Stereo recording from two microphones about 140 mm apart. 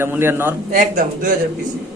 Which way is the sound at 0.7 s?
75° right (ahead or behind).